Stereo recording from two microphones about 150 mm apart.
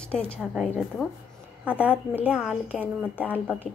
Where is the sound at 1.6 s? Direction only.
10° right (ahead or behind).